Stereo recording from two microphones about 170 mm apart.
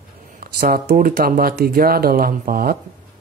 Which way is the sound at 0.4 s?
60° right (ahead or behind).